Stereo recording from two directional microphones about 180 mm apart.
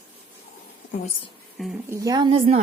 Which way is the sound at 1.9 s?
20° right (ahead or behind).